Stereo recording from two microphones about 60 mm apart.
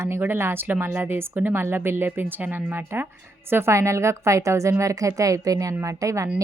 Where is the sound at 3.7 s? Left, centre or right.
Right.